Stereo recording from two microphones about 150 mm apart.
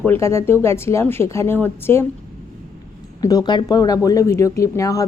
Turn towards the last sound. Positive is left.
turn(degrees=20)  # may be behind; listen again after turning